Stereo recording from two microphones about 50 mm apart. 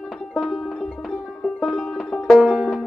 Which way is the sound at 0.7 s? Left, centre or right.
Centre.